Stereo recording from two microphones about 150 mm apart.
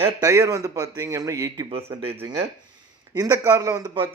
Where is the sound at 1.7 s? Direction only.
40° right (ahead or behind).